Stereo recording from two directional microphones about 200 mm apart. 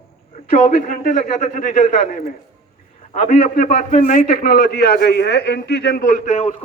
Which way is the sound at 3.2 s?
40° left (ahead or behind).